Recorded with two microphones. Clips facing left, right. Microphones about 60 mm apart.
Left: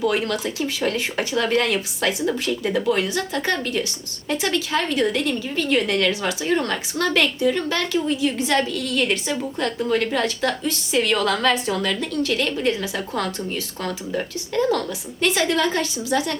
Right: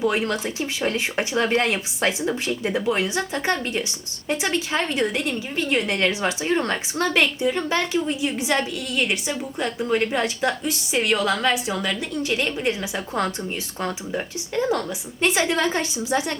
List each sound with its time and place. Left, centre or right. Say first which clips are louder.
0.0 s a woman's voice: left 1 dB; right